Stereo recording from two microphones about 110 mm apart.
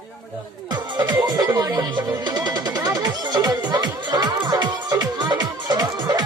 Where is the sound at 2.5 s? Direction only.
40° right (ahead or behind).